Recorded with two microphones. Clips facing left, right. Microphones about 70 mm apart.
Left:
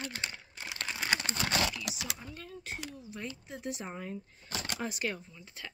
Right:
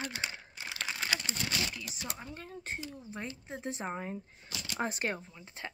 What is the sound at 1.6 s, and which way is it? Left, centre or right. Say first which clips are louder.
Speech: left 5 dB; left.